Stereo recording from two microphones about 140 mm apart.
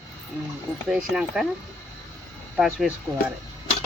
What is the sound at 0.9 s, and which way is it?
Speech, 5° right (ahead or behind).